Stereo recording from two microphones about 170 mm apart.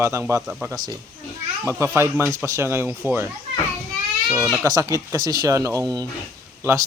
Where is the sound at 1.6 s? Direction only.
15° right (ahead or behind).